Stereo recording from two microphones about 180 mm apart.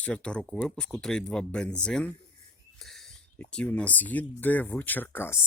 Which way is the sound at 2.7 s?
Centre (ahead or behind).